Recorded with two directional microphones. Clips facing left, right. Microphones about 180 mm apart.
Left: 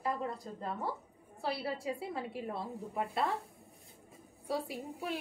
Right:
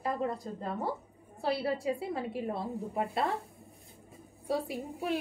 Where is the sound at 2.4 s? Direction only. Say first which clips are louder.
Right 5 dB; 25° right (ahead or behind).